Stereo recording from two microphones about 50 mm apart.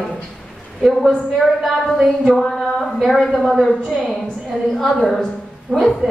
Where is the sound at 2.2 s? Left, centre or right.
Centre.